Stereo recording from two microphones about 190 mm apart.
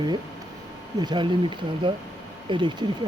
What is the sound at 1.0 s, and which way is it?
Speech, 25° right (ahead or behind).